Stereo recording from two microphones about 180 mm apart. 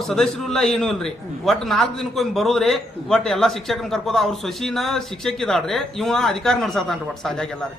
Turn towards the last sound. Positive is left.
turn(degrees=5)  # may be behind; listen again after turning